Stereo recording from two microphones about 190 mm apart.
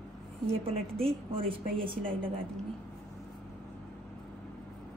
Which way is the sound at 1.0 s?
30° right (ahead or behind).